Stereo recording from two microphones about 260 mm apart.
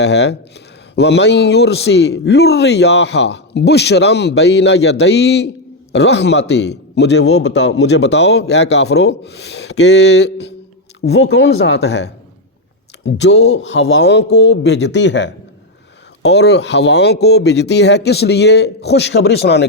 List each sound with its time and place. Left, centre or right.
0.0 s a man's voice: left